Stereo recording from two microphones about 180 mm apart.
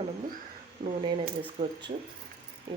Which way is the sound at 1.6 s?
25° right (ahead or behind).